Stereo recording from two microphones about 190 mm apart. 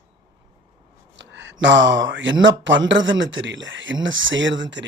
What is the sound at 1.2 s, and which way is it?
Speech, 70° right (ahead or behind).